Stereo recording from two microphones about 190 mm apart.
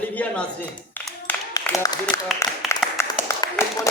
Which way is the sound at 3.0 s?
15° left (ahead or behind).